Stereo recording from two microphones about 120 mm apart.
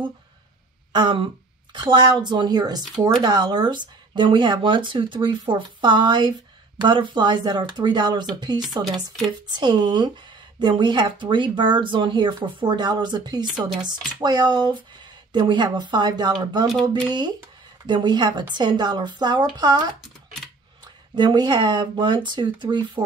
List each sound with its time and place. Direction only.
0.9 s a woman's voice: 40° right (ahead or behind)
17.8 s speech: 40° right (ahead or behind)
21.1 s speech: 35° right (ahead or behind)